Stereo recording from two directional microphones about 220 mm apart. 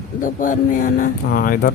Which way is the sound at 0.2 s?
35° left (ahead or behind).